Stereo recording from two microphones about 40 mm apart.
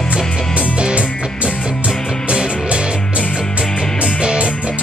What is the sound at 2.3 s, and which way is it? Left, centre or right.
Music, right.